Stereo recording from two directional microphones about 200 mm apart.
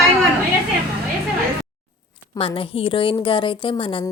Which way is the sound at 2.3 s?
25° left (ahead or behind).